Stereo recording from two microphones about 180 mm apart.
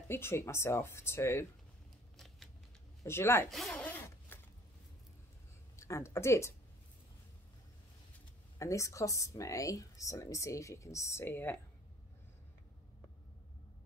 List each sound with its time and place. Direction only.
0.1 s speech: 15° left (ahead or behind)
2.1 s a sound: centre (ahead or behind)
3.0 s speech: 15° left (ahead or behind)
3.4 s zipper: centre (ahead or behind)
5.8 s speech: 15° left (ahead or behind)
8.5 s speech: 15° left (ahead or behind)